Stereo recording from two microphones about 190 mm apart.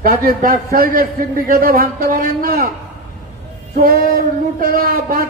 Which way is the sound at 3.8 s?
50° right (ahead or behind).